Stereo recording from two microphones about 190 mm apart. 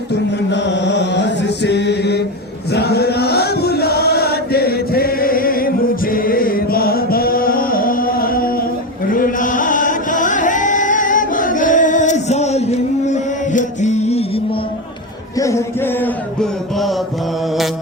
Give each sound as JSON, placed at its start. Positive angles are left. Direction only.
{"t": 0.1, "sound": "music", "side_deg": 65}
{"t": 2.7, "sound": "chant", "side_deg": 60}
{"t": 15.4, "sound": "music", "side_deg": 15}